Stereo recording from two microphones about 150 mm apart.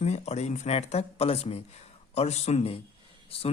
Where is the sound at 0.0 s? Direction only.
45° left (ahead or behind).